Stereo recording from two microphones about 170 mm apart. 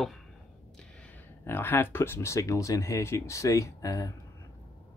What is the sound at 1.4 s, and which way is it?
Speech, 15° left (ahead or behind).